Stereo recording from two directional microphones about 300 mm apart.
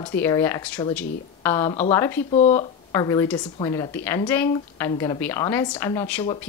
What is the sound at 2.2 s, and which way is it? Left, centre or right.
Speech, left.